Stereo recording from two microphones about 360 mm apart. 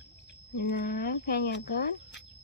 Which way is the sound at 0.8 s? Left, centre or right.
Left.